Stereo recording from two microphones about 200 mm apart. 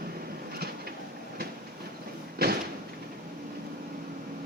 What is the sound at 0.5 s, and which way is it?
Vehicle, 50° right (ahead or behind).